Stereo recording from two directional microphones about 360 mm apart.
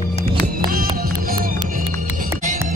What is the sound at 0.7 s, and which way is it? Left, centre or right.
Music, right.